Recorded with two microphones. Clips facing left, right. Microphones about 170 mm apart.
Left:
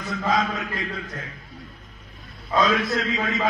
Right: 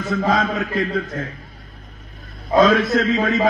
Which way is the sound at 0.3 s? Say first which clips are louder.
Right 1 dB; 55° right (ahead or behind).